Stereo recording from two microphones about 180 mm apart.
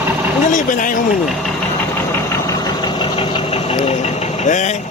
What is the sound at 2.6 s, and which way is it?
Engine, 25° left (ahead or behind).